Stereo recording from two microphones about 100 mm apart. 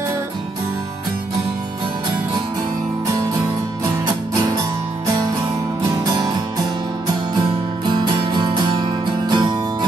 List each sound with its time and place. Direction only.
7.8 s music: 50° right (ahead or behind)